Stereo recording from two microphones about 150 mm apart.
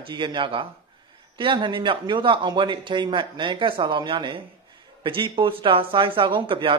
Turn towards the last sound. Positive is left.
turn(degrees=-35)  # may be behind; listen again after turning